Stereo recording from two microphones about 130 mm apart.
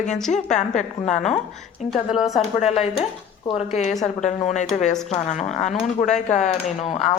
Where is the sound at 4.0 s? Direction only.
65° left (ahead or behind).